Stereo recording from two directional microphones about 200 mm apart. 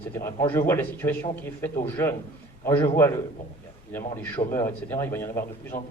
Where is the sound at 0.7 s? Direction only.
10° left (ahead or behind).